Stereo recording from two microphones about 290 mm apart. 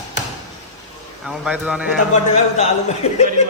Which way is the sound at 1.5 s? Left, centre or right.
Centre.